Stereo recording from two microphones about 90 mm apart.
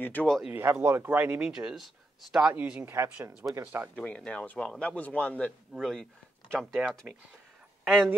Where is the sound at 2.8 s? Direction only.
25° right (ahead or behind).